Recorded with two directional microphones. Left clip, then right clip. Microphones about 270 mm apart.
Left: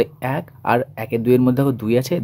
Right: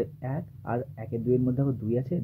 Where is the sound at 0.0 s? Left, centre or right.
Left.